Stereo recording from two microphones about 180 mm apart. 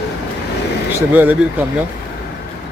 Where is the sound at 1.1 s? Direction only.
10° right (ahead or behind).